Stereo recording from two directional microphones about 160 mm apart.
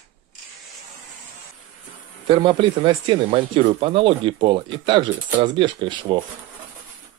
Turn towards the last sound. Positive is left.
turn(degrees=-30)  # may be behind; listen again after turning